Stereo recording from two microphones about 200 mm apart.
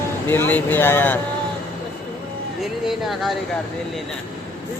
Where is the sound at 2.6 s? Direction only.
Centre (ahead or behind).